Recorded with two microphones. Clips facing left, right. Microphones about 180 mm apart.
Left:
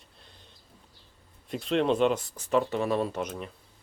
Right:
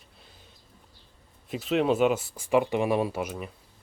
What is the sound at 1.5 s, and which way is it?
Speech, 5° right (ahead or behind).